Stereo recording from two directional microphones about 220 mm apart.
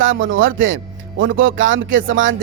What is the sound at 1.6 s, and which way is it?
Speech, 60° right (ahead or behind).